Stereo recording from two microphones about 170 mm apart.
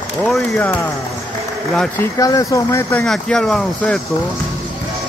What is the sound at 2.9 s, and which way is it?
A man's voice, 5° left (ahead or behind).